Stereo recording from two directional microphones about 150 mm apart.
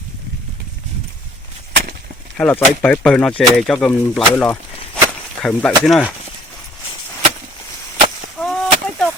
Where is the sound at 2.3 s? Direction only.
10° left (ahead or behind).